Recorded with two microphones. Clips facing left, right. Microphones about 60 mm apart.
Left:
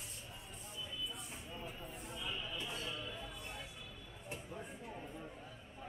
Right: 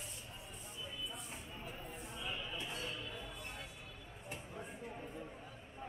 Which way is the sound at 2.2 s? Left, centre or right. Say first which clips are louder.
Even; right.